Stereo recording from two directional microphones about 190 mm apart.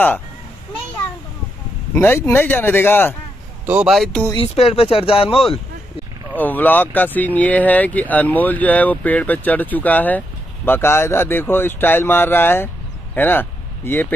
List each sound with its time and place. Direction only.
2.0 s speech: 15° left (ahead or behind)
3.6 s speech: 5° right (ahead or behind)
4.3 s speech: 30° left (ahead or behind)
6.3 s speech: 10° left (ahead or behind)